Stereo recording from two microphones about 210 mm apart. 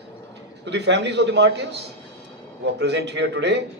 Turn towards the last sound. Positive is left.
turn(degrees=-55)  # may be behind; listen again after turning